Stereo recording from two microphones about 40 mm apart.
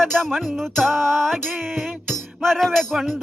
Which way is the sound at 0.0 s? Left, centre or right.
Centre.